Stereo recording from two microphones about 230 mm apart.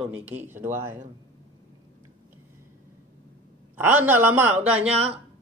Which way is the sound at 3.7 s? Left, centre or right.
Centre.